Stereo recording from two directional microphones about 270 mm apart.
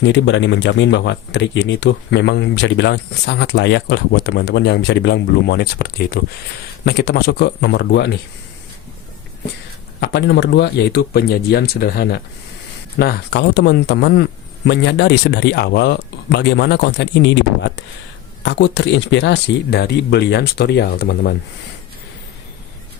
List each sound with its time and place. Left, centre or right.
0.0 s speech: left
10.0 s speech: left
18.4 s speech: left